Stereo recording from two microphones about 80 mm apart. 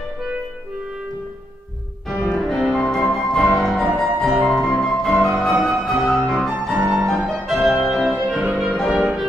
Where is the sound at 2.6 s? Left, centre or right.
Centre.